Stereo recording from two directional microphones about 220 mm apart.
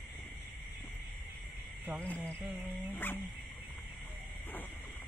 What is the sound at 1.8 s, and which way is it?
Cricket, 10° right (ahead or behind).